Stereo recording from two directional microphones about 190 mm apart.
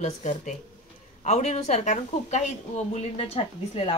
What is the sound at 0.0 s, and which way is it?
Speech, 40° left (ahead or behind).